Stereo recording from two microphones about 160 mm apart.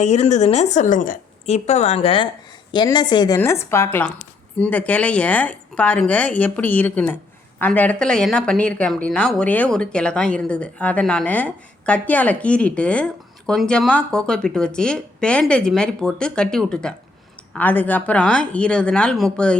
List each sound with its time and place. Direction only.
0.0 s a woman's voice: 45° left (ahead or behind)
2.7 s a woman's voice: 25° left (ahead or behind); by 19.5 s 5° left (ahead or behind)